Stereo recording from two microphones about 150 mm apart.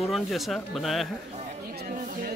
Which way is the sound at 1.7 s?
75° right (ahead or behind).